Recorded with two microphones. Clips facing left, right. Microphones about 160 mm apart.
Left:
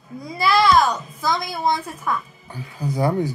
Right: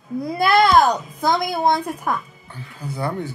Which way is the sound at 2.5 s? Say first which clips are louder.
Left 5 dB; 10° left (ahead or behind).